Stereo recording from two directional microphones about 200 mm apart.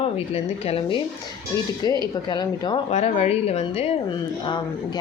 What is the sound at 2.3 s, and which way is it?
Speech, 20° left (ahead or behind).